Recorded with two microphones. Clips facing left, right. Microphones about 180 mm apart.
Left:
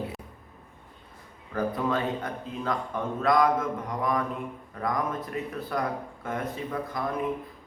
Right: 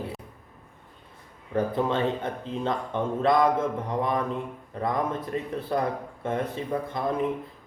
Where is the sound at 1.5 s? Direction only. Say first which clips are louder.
Right 2 dB; 25° right (ahead or behind).